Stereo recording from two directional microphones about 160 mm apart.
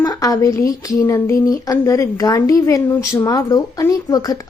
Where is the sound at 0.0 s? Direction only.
20° left (ahead or behind).